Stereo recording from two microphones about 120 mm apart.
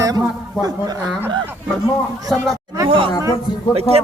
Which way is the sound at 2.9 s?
45° right (ahead or behind).